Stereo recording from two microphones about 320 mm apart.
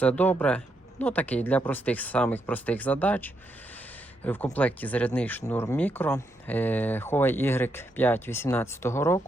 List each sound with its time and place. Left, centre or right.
0.0 s speech: centre